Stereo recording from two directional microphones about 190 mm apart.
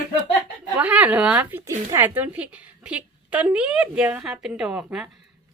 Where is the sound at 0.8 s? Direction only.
10° right (ahead or behind).